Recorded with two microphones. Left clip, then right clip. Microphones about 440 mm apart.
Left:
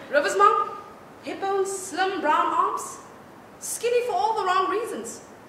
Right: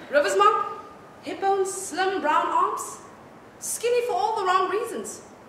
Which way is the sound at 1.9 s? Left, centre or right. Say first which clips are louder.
Even; centre.